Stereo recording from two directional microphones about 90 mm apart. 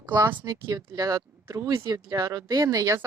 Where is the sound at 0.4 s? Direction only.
40° right (ahead or behind).